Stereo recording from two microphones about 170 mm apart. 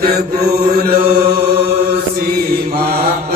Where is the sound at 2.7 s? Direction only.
60° right (ahead or behind).